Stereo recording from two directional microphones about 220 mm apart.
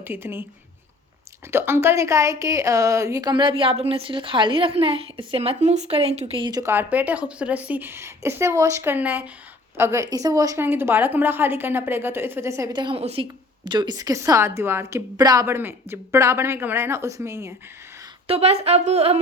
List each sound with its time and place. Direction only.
0.0 s a woman's voice: 10° right (ahead or behind)
1.5 s a woman's voice: 10° right (ahead or behind)
18.3 s speech: 30° right (ahead or behind)